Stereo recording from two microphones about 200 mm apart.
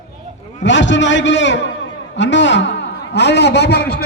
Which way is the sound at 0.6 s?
65° left (ahead or behind).